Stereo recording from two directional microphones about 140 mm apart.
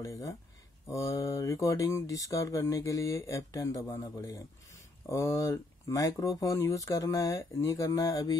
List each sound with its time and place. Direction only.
0.0 s speech: 25° left (ahead or behind)